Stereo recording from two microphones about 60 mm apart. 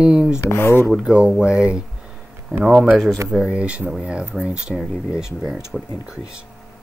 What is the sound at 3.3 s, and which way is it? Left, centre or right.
Speech, centre.